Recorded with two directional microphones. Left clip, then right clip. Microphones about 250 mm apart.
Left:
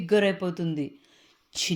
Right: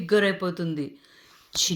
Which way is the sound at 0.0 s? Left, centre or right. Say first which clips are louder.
Right 1 dB; left.